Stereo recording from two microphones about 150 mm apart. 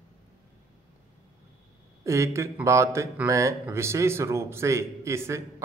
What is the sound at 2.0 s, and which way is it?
A man's voice, 20° right (ahead or behind).